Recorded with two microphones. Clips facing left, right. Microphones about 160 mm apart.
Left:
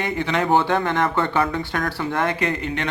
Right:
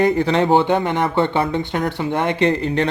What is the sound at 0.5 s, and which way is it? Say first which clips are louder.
Speech: right 3 dB; 20° right (ahead or behind).